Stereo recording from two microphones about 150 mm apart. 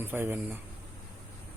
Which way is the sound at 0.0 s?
15° right (ahead or behind).